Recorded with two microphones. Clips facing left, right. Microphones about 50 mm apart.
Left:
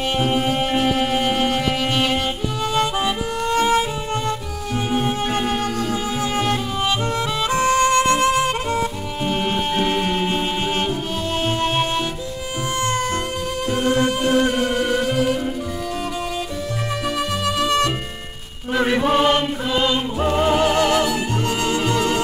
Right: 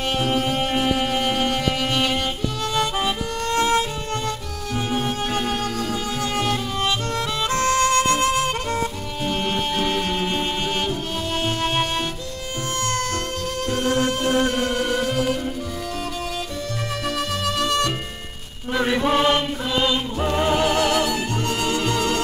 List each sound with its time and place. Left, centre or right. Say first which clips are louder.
0.2 s music: left 3 dB; centre
4.9 s music: left 3 dB; centre
13.7 s music: left 3 dB; centre
17.5 s music: left 3 dB; centre
18.7 s chant: left 2 dB; centre
21.0 s music: left 2 dB; centre